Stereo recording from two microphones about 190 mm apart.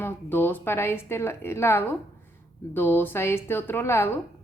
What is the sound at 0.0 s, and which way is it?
A woman's voice, 10° left (ahead or behind).